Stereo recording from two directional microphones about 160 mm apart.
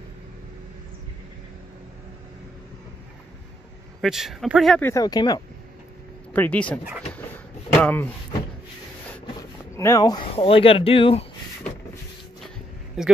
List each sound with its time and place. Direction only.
4.0 s speech: centre (ahead or behind)
4.8 s speech: 20° left (ahead or behind)
6.3 s speech: 10° left (ahead or behind)
7.1 s drawer open or close: 10° left (ahead or behind)
9.4 s a sound: 20° left (ahead or behind)
10.3 s speech: 35° left (ahead or behind)
13.0 s speech: 5° right (ahead or behind)